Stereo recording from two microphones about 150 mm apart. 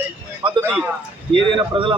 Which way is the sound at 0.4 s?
35° right (ahead or behind).